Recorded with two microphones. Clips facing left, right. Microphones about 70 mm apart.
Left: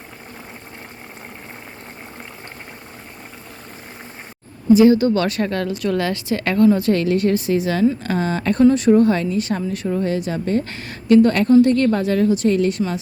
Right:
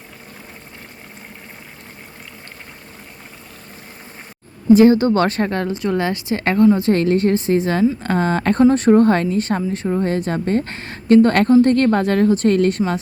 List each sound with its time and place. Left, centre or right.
4.7 s a woman's voice: right
10.1 s a woman's voice: right